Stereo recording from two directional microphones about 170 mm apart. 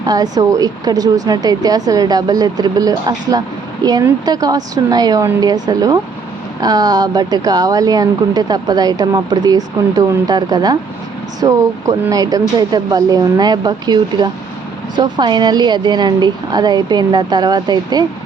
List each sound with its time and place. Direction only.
0.0 s a woman's voice: 20° right (ahead or behind)